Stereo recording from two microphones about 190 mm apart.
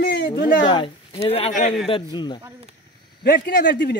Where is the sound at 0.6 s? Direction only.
25° left (ahead or behind).